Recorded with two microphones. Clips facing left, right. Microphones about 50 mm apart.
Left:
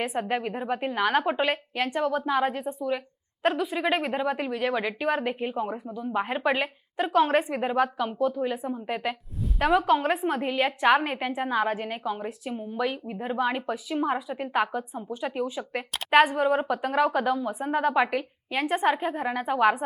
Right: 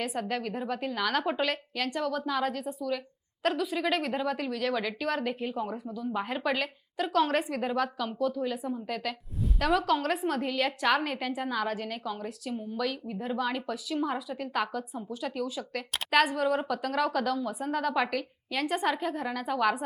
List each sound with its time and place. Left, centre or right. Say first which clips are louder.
0.0 s a woman's voice: left 4 dB; left